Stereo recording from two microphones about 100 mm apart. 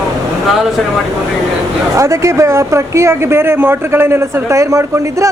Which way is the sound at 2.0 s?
30° right (ahead or behind).